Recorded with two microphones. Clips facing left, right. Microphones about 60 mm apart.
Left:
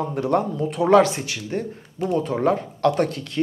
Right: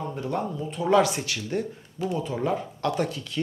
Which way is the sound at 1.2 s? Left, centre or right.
Left.